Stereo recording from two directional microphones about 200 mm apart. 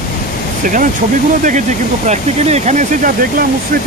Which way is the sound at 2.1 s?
35° right (ahead or behind).